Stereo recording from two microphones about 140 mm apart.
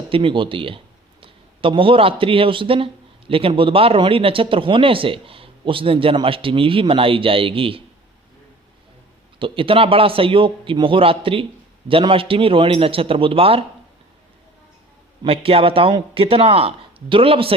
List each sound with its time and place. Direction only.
0.1 s speech: 40° right (ahead or behind)
9.4 s speech: 40° right (ahead or behind)
15.2 s speech: 40° right (ahead or behind)